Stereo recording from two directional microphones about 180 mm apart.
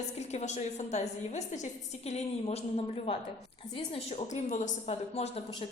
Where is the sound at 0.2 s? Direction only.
40° left (ahead or behind).